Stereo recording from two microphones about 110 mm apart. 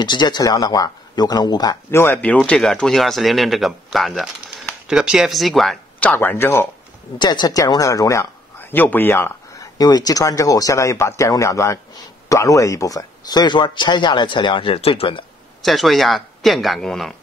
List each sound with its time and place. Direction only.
0.0 s speech: 45° left (ahead or behind)
1.9 s speech: 20° left (ahead or behind); by 5.8 s centre (ahead or behind)
5.9 s speech: 15° left (ahead or behind)
7.2 s speech: 40° left (ahead or behind)
8.5 s a sound: 20° left (ahead or behind)
9.8 s speech: 35° left (ahead or behind); by 15.2 s 55° left (ahead or behind)
15.6 s speech: centre (ahead or behind)